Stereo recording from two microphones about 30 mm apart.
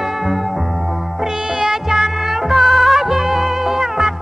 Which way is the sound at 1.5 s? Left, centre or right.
Centre.